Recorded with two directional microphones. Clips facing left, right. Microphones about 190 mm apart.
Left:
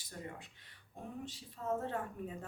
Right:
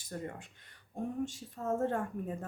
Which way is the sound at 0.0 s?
45° right (ahead or behind).